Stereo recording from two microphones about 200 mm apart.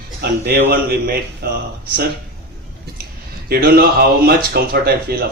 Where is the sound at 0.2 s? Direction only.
55° right (ahead or behind).